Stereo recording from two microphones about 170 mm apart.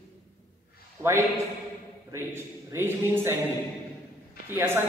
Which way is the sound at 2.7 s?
15° right (ahead or behind).